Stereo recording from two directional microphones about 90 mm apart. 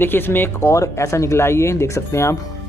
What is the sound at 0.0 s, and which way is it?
Speech, 25° left (ahead or behind).